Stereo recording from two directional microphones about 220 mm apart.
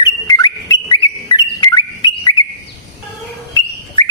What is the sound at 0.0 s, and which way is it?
Bird, 15° left (ahead or behind).